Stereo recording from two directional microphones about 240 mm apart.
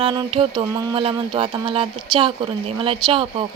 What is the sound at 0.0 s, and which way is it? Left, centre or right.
Music, centre.